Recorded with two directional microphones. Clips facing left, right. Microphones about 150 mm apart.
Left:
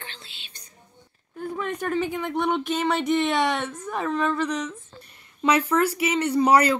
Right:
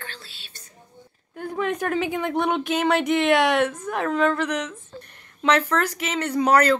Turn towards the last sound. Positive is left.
turn(degrees=10)  # may be behind; listen again after turning